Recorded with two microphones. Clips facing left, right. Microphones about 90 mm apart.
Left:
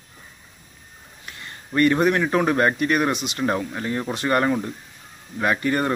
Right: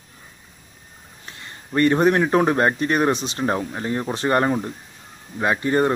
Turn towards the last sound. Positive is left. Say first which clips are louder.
# right 2 dB
turn(degrees=-25)  # may be behind; listen again after turning